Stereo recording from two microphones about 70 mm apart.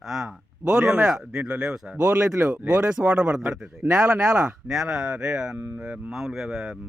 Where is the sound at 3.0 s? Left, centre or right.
Centre.